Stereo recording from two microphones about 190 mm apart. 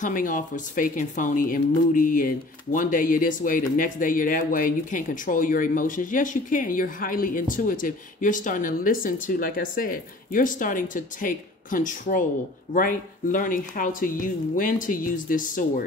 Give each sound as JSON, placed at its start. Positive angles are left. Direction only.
{"t": 0.0, "sound": "speech", "side_deg": 45}